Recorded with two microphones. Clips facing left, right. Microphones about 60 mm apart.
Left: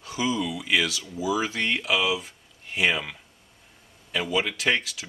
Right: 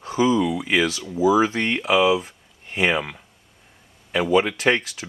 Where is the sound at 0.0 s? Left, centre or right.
Right.